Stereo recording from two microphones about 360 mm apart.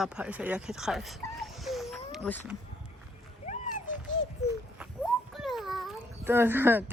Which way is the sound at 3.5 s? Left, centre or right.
Left.